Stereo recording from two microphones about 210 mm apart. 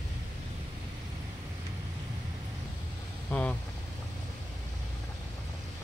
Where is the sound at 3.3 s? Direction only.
10° left (ahead or behind).